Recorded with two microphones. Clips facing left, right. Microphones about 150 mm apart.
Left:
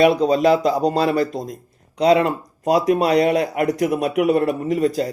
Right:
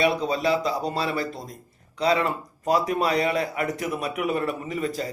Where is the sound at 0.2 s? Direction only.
45° left (ahead or behind).